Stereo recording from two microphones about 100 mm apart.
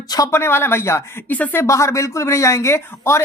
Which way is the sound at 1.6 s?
30° left (ahead or behind).